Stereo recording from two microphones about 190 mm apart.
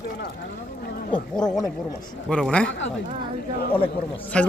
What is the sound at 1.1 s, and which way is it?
Speech, 5° left (ahead or behind).